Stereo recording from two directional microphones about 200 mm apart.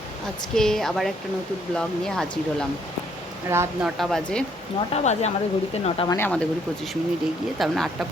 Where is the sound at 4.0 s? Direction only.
Centre (ahead or behind).